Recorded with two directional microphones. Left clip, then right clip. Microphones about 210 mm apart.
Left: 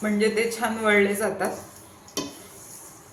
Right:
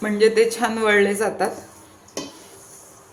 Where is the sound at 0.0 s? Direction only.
40° right (ahead or behind).